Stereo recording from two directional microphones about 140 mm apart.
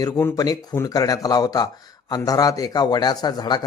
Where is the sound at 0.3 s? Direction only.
25° left (ahead or behind).